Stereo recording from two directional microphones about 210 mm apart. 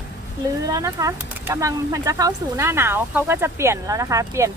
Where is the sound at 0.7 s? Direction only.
15° right (ahead or behind).